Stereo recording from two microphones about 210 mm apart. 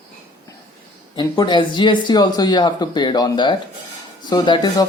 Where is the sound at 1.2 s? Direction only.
20° left (ahead or behind).